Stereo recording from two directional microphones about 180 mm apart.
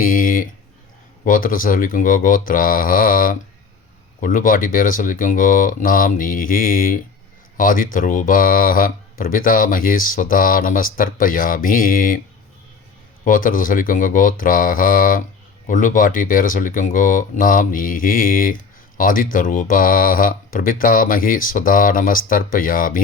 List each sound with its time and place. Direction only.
0.0 s a sound: 50° left (ahead or behind)
1.2 s speech: 50° left (ahead or behind)
13.2 s speech: 50° left (ahead or behind)